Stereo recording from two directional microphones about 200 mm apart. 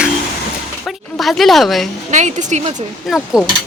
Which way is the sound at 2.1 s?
35° right (ahead or behind).